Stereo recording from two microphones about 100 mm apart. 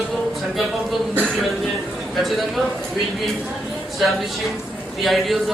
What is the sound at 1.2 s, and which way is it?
A man's voice, centre (ahead or behind).